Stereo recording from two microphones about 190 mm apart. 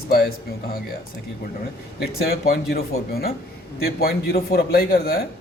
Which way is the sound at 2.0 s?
55° left (ahead or behind).